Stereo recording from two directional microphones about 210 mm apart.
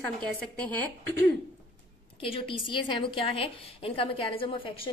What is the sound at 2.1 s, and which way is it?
A woman's voice, 25° left (ahead or behind).